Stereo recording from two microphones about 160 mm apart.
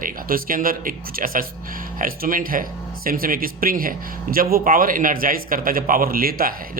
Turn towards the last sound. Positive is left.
turn(degrees=-65)  # may be behind; listen again after turning